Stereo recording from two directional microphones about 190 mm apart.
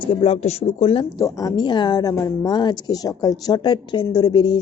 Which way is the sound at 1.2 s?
15° left (ahead or behind).